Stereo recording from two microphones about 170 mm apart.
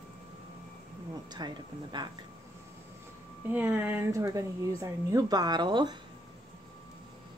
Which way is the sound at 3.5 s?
10° right (ahead or behind).